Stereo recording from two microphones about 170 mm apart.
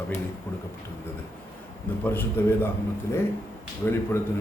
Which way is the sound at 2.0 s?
10° left (ahead or behind).